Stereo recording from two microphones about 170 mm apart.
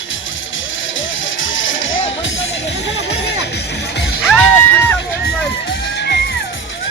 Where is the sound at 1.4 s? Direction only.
90° left.